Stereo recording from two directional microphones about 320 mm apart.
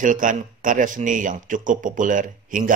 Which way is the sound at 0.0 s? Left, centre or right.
Right.